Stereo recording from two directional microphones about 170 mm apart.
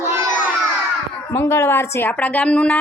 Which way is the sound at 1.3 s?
15° left (ahead or behind).